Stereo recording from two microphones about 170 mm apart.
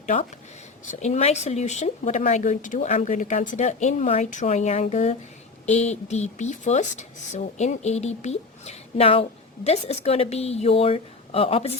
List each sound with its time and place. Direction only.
0.0 s speech: 35° left (ahead or behind)